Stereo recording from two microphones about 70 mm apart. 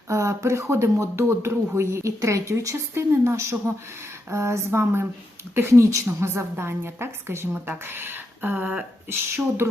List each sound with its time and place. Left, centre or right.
0.1 s a woman's voice: right
7.9 s a sound: right
9.0 s a woman's voice: right